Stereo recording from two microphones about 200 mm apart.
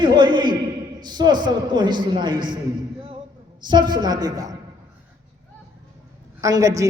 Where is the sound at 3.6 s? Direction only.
20° right (ahead or behind).